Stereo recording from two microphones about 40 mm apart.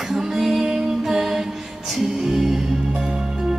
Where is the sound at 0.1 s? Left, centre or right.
Centre.